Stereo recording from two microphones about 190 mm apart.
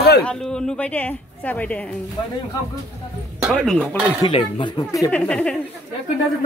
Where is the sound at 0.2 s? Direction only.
5° left (ahead or behind).